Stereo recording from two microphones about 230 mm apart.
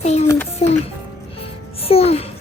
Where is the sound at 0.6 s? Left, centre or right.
Left.